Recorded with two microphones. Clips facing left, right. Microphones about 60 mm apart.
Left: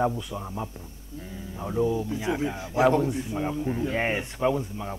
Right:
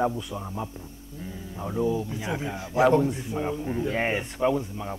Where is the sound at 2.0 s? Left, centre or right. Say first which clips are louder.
Left 3 dB; centre.